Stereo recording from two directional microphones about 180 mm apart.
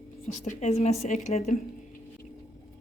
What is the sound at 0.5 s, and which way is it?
A woman's voice, 40° left (ahead or behind).